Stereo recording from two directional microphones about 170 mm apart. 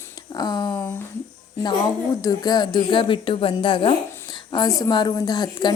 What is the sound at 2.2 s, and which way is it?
Speech, 25° left (ahead or behind).